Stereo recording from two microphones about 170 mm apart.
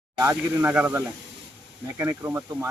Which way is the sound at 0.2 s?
15° right (ahead or behind).